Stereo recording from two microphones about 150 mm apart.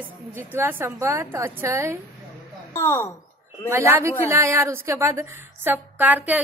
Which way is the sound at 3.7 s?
15° right (ahead or behind).